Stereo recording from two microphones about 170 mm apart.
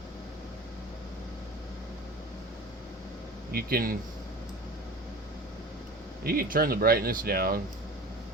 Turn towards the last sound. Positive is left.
turn(degrees=-60)  # may be behind; listen again after turning